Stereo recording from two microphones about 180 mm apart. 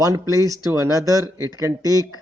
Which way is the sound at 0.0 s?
20° right (ahead or behind).